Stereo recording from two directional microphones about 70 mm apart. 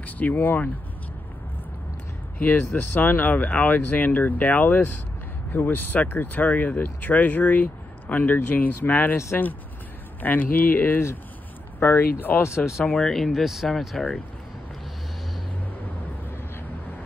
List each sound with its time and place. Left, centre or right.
0.0 s speech: left
2.4 s speech: left
12.8 s speech: centre